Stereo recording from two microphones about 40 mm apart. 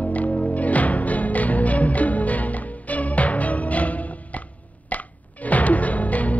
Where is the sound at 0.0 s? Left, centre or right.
Left.